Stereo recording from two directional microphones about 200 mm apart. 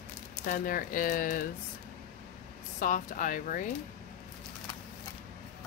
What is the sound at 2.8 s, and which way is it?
Speech, 40° left (ahead or behind).